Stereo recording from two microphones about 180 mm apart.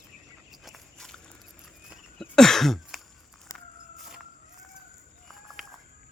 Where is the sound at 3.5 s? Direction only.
15° left (ahead or behind).